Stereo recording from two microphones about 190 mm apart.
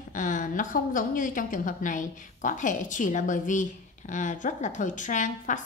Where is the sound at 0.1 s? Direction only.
45° left (ahead or behind).